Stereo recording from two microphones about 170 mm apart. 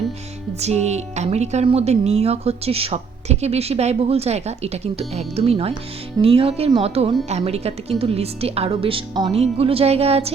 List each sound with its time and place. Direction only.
0.6 s speech: 40° right (ahead or behind)